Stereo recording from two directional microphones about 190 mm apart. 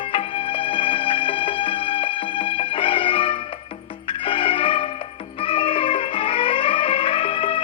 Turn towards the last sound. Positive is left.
turn(degrees=30)  # may be behind; listen again after turning